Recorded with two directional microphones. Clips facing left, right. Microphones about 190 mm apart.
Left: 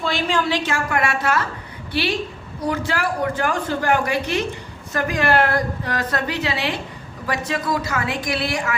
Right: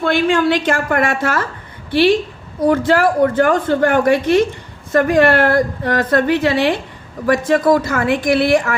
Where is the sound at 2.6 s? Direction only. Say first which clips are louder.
Right 10 dB; 55° right (ahead or behind).